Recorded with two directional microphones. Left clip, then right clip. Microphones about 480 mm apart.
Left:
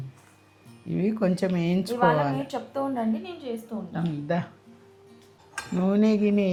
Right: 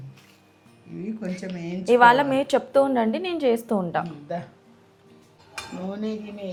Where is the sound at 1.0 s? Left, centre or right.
Left.